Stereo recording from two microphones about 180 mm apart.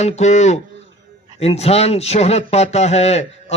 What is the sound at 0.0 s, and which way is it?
Speech, 40° left (ahead or behind).